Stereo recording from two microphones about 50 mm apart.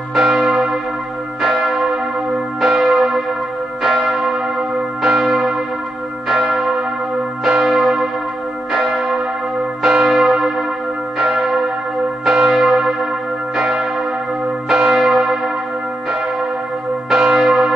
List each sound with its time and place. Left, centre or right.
0.1 s church bell: centre
1.7 s church bell: centre
14.9 s church bell: centre
17.1 s church bell: centre